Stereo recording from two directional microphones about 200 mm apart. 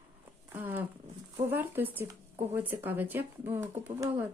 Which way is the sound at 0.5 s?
10° right (ahead or behind).